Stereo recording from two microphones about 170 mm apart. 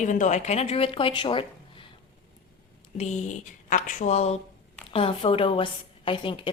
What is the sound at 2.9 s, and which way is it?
A woman's voice, 40° left (ahead or behind).